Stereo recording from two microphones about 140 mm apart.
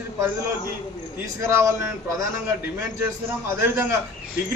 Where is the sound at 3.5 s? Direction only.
15° right (ahead or behind).